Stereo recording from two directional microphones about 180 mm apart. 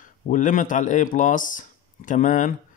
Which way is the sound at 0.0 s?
45° left (ahead or behind).